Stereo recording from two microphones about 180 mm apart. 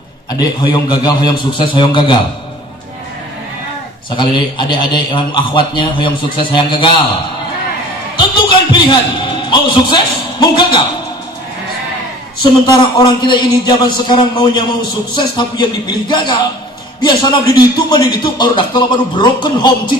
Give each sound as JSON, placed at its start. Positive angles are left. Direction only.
{"t": 0.3, "sound": "a man's voice", "side_deg": 25}
{"t": 4.1, "sound": "a man's voice", "side_deg": 25}
{"t": 8.2, "sound": "a man's voice", "side_deg": 25}
{"t": 12.6, "sound": "a man's voice", "side_deg": 25}